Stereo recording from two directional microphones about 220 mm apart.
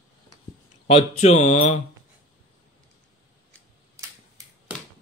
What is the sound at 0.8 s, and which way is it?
Speech, 30° left (ahead or behind).